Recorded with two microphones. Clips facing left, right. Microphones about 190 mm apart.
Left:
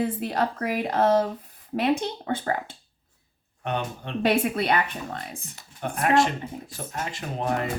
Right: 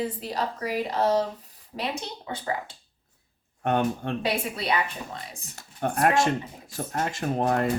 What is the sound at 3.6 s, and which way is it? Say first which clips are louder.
Speech: right 5 dB; 50° right (ahead or behind).